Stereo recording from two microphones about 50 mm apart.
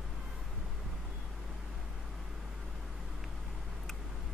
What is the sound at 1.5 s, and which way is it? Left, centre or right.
Vehicle, centre.